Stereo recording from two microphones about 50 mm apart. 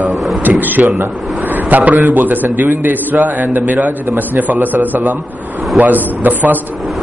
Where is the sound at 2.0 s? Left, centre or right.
Right.